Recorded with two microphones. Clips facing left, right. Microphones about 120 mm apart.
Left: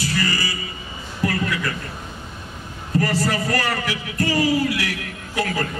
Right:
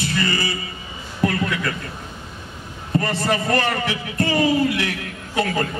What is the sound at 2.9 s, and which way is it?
Mantra, 25° right (ahead or behind).